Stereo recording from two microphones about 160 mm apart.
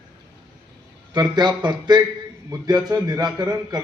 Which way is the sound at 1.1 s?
25° right (ahead or behind).